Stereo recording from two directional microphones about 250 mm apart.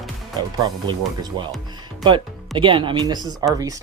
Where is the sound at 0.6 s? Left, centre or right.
Centre.